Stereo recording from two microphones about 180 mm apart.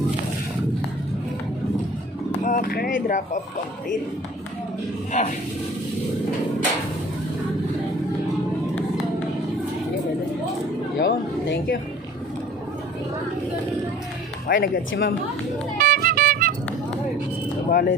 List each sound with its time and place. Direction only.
2.4 s speech: 50° left (ahead or behind)
11.0 s speech: 65° left (ahead or behind)
14.4 s speech: 60° left (ahead or behind)
15.8 s music: 55° right (ahead or behind)
17.7 s speech: 55° left (ahead or behind)